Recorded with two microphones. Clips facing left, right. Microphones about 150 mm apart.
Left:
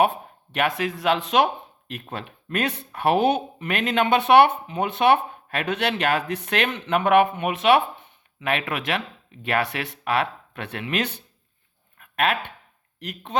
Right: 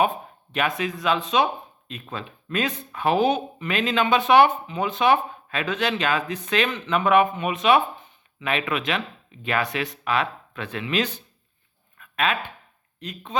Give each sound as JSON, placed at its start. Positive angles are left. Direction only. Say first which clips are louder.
{"t": 0.0, "sound": "speech", "louder": "left 2 dB", "side_deg": 60}
{"t": 12.1, "sound": "speech", "louder": "left 1 dB", "side_deg": 60}